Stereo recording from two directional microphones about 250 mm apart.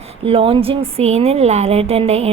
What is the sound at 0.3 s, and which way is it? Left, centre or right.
Speech, right.